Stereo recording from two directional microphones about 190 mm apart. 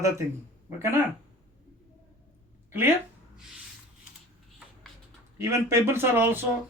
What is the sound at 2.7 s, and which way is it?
Speech, 10° right (ahead or behind).